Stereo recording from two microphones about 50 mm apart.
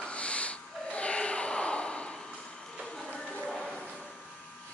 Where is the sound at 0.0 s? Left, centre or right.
Left.